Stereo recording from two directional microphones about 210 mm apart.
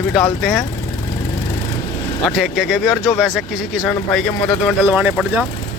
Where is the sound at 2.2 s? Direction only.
Centre (ahead or behind).